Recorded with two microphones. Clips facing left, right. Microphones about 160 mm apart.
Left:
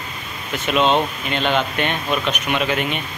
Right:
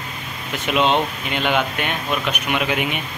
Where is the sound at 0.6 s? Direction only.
15° right (ahead or behind).